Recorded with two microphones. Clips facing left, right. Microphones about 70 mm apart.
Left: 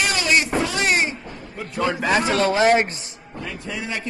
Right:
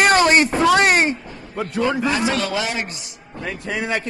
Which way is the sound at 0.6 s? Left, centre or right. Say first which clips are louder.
Right 7 dB; right.